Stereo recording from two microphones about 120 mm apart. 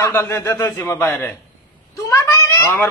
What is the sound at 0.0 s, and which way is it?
A man's voice, 20° left (ahead or behind).